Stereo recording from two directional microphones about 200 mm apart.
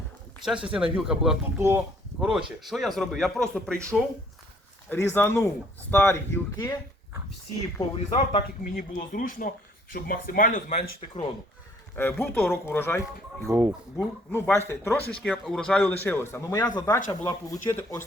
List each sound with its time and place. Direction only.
0.4 s speech: 5° right (ahead or behind); by 6.7 s 15° left (ahead or behind)
8.7 s speech: 40° left (ahead or behind)
11.9 s speech: 10° left (ahead or behind)
13.5 s speech: 10° right (ahead or behind)
13.9 s speech: 10° left (ahead or behind)